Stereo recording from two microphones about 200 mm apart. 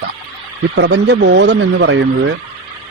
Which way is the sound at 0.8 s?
55° right (ahead or behind).